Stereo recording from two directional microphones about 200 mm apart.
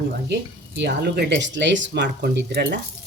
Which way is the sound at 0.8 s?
55° right (ahead or behind).